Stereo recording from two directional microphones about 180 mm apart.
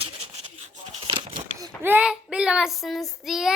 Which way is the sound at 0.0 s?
35° right (ahead or behind).